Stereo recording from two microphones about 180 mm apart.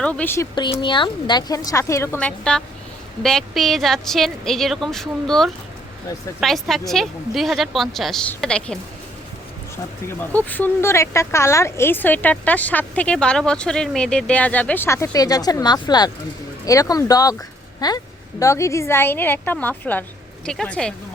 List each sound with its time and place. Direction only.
0.0 s speech: 10° left (ahead or behind)
0.5 s a woman's voice: 25° left (ahead or behind); by 8.8 s 5° left (ahead or behind)
10.1 s speech: 10° left (ahead or behind)